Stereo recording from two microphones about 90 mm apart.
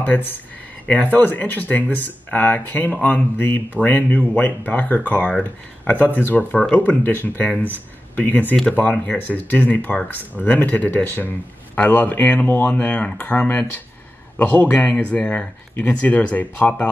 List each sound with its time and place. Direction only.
0.0 s speech: 20° left (ahead or behind)